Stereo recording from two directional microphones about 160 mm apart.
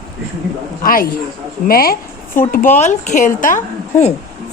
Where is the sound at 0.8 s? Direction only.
65° left (ahead or behind).